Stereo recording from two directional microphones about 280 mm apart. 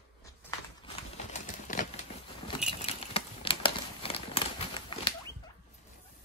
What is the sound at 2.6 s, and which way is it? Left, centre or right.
Crumpling, centre.